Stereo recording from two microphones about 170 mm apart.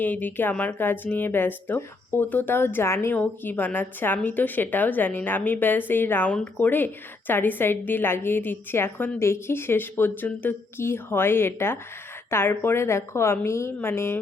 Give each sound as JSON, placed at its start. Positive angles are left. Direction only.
{"t": 0.0, "sound": "speech", "side_deg": 10}